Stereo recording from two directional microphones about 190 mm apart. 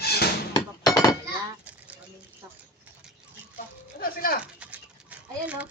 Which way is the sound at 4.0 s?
50° left (ahead or behind).